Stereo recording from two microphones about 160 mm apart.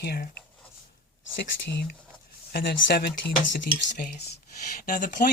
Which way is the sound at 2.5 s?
90° left.